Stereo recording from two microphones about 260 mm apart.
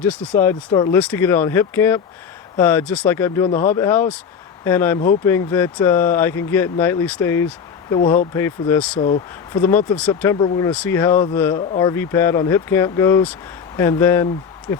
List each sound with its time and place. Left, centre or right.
0.0 s speech: centre
9.0 s speech: left
9.5 s speech: centre